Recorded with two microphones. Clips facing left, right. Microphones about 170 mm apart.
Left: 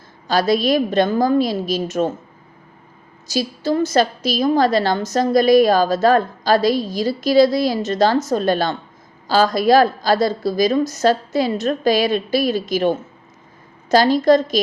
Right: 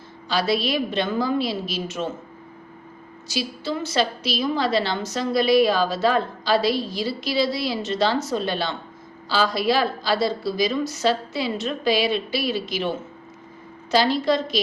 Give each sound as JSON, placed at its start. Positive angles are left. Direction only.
{"t": 0.3, "sound": "a woman's voice", "side_deg": 45}
{"t": 3.2, "sound": "a woman's voice", "side_deg": 40}